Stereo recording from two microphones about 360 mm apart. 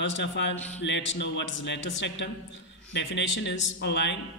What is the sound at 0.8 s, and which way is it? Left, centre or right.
A man's voice, left.